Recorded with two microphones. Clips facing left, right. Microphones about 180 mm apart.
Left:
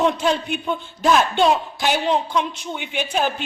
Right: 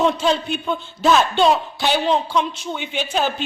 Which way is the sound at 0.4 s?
15° left (ahead or behind).